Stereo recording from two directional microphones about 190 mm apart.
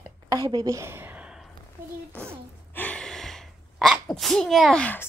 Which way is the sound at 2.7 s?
5° left (ahead or behind).